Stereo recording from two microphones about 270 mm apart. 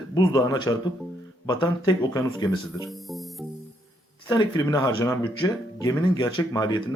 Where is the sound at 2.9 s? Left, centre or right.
Centre.